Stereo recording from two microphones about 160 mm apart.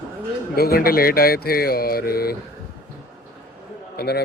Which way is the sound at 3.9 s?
85° left.